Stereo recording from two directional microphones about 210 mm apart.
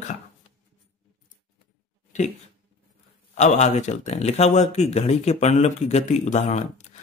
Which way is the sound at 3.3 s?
35° left (ahead or behind).